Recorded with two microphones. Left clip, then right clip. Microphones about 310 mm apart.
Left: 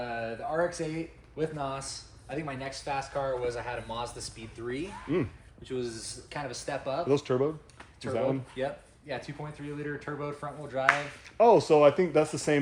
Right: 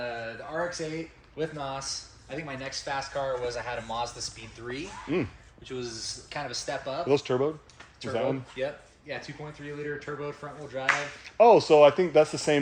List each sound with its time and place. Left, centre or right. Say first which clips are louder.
0.2 s a sound: left 3 dB; centre
1.4 s speech: even; centre
5.1 s speech: right 1 dB; centre
5.6 s speech: even; centre
7.1 s speech: right 2 dB; centre
8.1 s speech: right 1 dB; centre
11.3 s speech: right 3 dB; right